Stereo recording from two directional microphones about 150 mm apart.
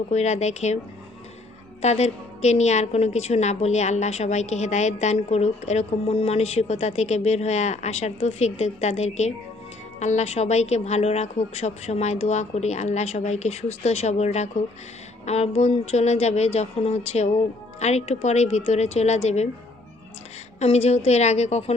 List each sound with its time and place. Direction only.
0.1 s a woman's voice: 50° left (ahead or behind)
1.8 s a woman's voice: 45° left (ahead or behind)
20.6 s a woman's voice: 45° left (ahead or behind)